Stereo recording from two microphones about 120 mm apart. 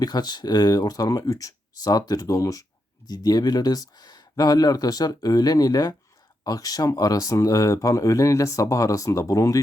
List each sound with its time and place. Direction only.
0.0 s speech: 35° left (ahead or behind)